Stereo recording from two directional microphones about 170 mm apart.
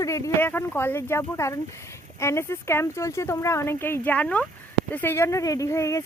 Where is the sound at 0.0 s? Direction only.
20° left (ahead or behind).